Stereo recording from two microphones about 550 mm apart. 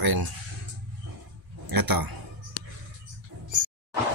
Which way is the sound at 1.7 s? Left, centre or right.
Right.